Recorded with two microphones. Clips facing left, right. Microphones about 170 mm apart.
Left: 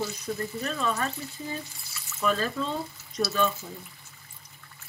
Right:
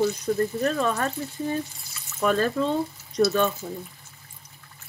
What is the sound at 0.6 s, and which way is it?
Speech, 55° right (ahead or behind).